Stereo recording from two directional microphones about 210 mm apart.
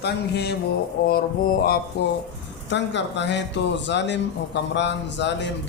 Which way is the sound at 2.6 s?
55° left (ahead or behind).